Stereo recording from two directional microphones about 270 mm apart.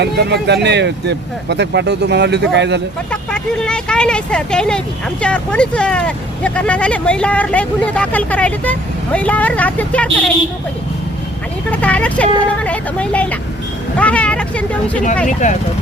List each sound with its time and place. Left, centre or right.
0.0 s speech: right
3.1 s speech: centre
11.7 s speech: centre
15.3 s speech: left